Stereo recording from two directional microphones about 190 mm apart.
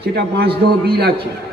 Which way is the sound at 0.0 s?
55° right (ahead or behind).